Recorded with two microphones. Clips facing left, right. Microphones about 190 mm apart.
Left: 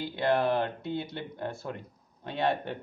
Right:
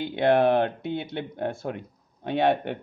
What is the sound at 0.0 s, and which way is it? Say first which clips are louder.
Speech: right 6 dB; 65° right (ahead or behind).